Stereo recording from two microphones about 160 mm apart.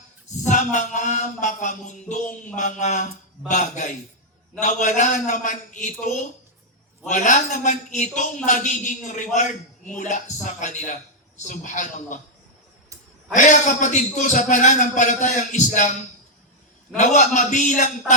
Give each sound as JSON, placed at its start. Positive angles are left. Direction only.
{"t": 0.4, "sound": "a man's voice", "side_deg": 50}
{"t": 13.3, "sound": "a man's voice", "side_deg": 50}
{"t": 17.0, "sound": "a man's voice", "side_deg": 50}